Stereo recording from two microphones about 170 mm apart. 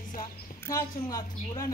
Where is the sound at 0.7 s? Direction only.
20° left (ahead or behind).